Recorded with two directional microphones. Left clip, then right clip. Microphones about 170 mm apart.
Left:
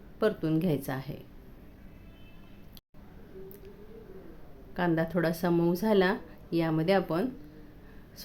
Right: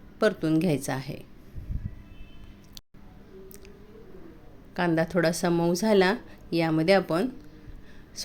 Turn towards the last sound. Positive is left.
turn(degrees=-15)  # may be behind; listen again after turning